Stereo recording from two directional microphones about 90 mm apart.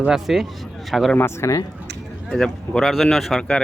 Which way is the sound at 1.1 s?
25° left (ahead or behind).